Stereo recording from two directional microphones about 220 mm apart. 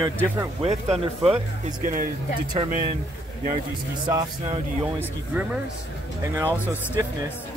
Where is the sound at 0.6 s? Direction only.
30° right (ahead or behind).